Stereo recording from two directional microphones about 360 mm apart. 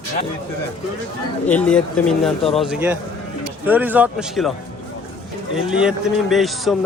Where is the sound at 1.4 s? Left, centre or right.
Centre.